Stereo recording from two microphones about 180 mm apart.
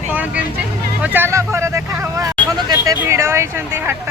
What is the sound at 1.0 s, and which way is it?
Speech, 10° right (ahead or behind).